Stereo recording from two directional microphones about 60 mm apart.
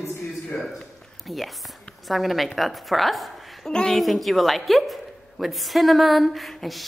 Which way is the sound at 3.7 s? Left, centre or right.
Centre.